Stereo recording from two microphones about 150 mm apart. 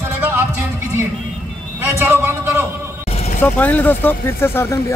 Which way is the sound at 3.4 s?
10° left (ahead or behind).